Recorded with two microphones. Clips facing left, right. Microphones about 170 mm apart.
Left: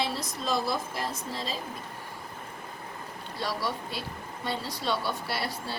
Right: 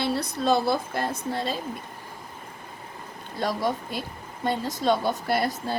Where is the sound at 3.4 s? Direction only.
50° right (ahead or behind).